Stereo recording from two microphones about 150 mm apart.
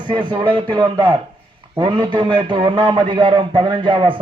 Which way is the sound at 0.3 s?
30° right (ahead or behind).